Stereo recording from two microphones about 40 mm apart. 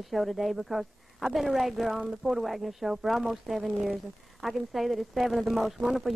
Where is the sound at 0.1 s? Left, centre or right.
Centre.